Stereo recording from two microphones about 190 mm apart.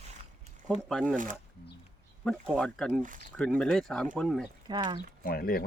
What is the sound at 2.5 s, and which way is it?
Speech, 5° left (ahead or behind).